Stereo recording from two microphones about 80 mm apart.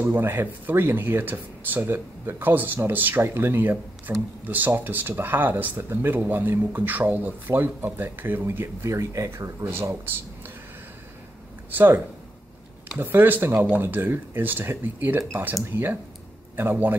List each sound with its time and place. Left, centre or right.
0.0 s speech: right
8.8 s speech: right
9.8 s speech: right
11.7 s speech: right